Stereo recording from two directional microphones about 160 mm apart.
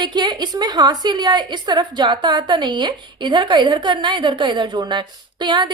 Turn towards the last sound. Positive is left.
turn(degrees=-30)  # may be behind; listen again after turning